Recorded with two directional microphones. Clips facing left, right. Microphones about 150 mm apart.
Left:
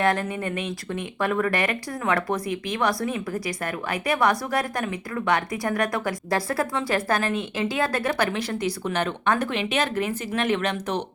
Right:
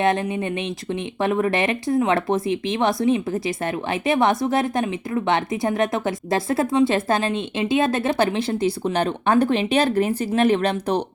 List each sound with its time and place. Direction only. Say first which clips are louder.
0.0 s a woman's voice: right 3 dB; 20° right (ahead or behind)